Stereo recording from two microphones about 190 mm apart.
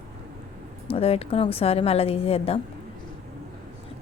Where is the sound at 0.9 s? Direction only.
30° left (ahead or behind).